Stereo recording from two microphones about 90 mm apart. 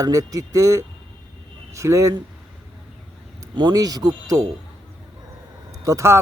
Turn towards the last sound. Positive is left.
turn(degrees=-35)  # may be behind; listen again after turning